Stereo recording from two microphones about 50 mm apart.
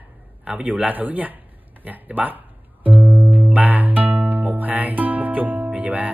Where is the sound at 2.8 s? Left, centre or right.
Right.